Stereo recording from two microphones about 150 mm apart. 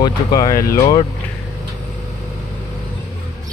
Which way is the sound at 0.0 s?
25° left (ahead or behind).